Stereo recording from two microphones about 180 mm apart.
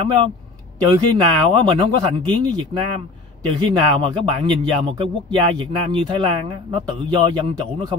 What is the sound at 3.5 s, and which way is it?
Speech, 25° right (ahead or behind).